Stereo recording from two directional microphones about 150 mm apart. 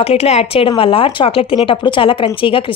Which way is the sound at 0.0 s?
40° left (ahead or behind).